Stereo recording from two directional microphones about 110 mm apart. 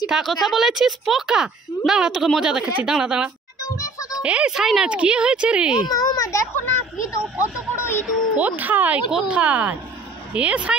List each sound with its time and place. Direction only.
0.0 s speech: 5° right (ahead or behind)
3.6 s music: 30° left (ahead or behind)
4.2 s speech: 10° right (ahead or behind)
5.9 s a sound: 35° left (ahead or behind)
7.2 s music: 10° right (ahead or behind)
7.7 s music: 20° left (ahead or behind)
8.4 s speech: 15° right (ahead or behind)